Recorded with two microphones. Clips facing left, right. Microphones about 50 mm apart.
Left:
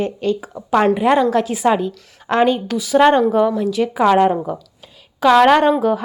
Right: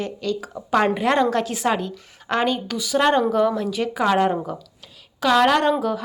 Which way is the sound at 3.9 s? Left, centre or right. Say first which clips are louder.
Left 6 dB; centre.